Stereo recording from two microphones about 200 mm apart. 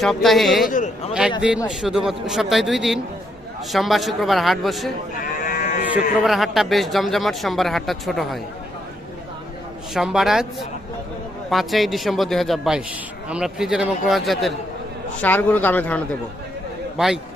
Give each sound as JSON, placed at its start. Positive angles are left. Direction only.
{"t": 0.0, "sound": "speech", "side_deg": 0}
{"t": 0.7, "sound": "a man's voice", "side_deg": 40}
{"t": 1.6, "sound": "speech", "side_deg": 0}
{"t": 5.5, "sound": "livestock", "side_deg": 40}
{"t": 5.8, "sound": "speech", "side_deg": -5}
{"t": 9.9, "sound": "speech", "side_deg": 0}